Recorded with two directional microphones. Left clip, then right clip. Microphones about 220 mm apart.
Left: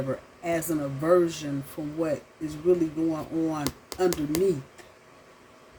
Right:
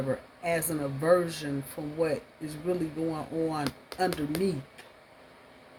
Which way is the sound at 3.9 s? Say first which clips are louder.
Left 2 dB; 10° left (ahead or behind).